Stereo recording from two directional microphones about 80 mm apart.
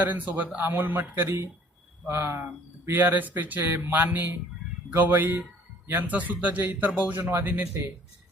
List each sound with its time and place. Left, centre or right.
0.1 s speech: right